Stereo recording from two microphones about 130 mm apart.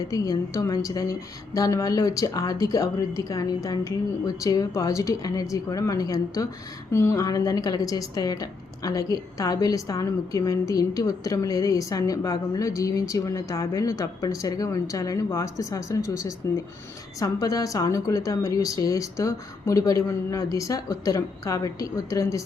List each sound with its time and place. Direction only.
0.1 s a woman's voice: 25° left (ahead or behind)